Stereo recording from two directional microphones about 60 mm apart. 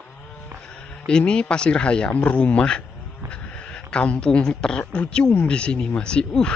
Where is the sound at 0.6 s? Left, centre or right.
Centre.